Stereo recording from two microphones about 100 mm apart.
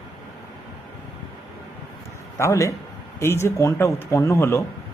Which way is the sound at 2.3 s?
30° left (ahead or behind).